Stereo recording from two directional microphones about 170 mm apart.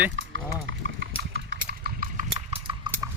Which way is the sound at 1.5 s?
65° right (ahead or behind).